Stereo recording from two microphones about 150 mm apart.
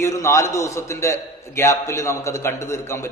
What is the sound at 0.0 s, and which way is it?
A man's voice, 20° left (ahead or behind).